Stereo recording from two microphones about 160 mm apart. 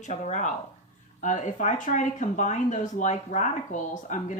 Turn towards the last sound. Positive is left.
turn(degrees=50)  # may be behind; listen again after turning